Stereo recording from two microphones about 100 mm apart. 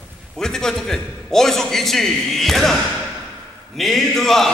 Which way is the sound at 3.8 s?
Centre (ahead or behind).